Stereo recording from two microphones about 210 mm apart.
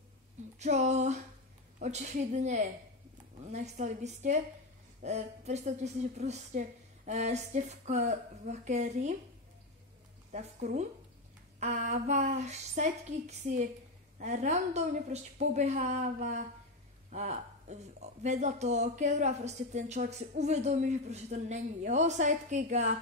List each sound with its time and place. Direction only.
0.6 s speech: 35° right (ahead or behind)
10.3 s speech: 35° right (ahead or behind)
14.1 s speech: 35° right (ahead or behind)